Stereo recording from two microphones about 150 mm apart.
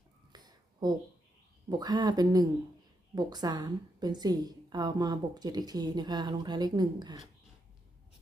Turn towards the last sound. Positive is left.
turn(degrees=-30)  # may be behind; listen again after turning